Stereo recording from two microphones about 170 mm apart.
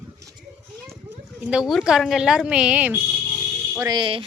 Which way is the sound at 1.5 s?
Centre (ahead or behind).